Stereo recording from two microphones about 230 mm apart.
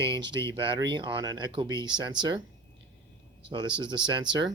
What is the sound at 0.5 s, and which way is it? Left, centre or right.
Speech, right.